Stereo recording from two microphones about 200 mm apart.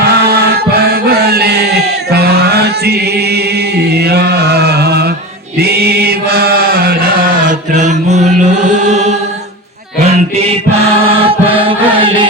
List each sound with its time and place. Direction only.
0.0 s chant: 55° right (ahead or behind)
7.7 s chant: 35° right (ahead or behind)
10.1 s music: 30° right (ahead or behind)